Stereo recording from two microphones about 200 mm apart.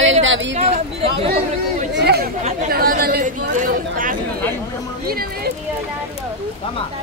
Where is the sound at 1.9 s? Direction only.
55° right (ahead or behind).